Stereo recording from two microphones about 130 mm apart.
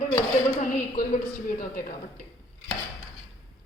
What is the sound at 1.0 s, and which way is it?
Speech, 90° left.